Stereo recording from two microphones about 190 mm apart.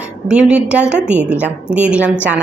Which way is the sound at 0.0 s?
5° right (ahead or behind).